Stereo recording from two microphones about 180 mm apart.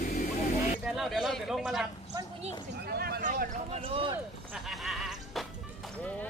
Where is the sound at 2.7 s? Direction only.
60° right (ahead or behind).